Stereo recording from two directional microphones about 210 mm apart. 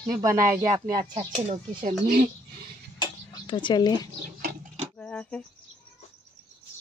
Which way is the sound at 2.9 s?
20° left (ahead or behind).